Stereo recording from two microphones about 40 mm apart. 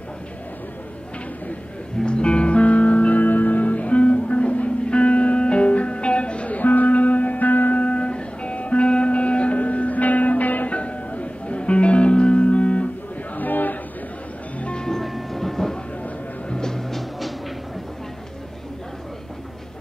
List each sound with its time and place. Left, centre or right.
2.0 s music: left
7.8 s music: left
10.7 s music: left
13.4 s a sound: left
14.6 s music: left
14.9 s train: centre
16.5 s music: centre